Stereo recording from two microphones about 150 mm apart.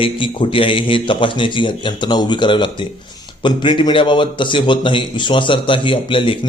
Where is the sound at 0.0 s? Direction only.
35° left (ahead or behind).